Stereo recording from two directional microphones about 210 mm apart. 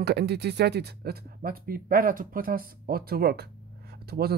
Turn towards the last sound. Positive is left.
turn(degrees=-50)  # may be behind; listen again after turning